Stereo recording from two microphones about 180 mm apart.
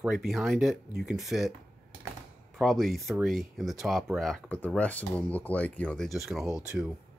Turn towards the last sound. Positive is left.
turn(degrees=-5)  # may be behind; listen again after turning